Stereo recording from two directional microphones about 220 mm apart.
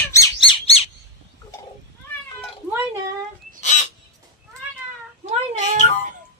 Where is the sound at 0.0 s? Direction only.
15° left (ahead or behind).